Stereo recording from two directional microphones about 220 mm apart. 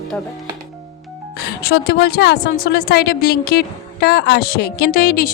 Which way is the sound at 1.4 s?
45° left (ahead or behind).